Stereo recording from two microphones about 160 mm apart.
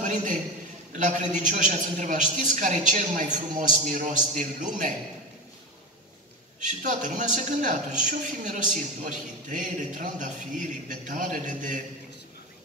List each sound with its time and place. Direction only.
0.0 s a sound: 50° right (ahead or behind)
0.9 s a woman's voice: 50° right (ahead or behind)
6.6 s a woman's voice: 55° right (ahead or behind)